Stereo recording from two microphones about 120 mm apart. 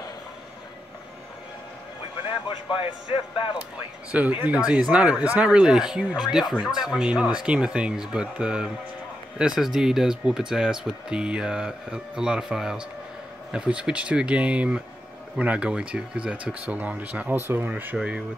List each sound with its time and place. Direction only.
2.2 s speech: 50° left (ahead or behind)
4.1 s speech: 10° right (ahead or behind)